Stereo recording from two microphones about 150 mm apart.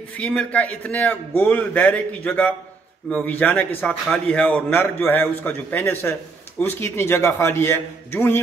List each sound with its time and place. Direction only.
0.2 s a man's voice: 10° left (ahead or behind)